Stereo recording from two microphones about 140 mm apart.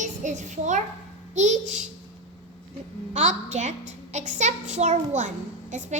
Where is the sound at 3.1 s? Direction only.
55° right (ahead or behind).